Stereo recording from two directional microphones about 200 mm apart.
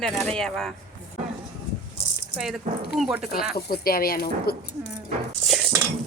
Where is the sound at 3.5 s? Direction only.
50° left (ahead or behind).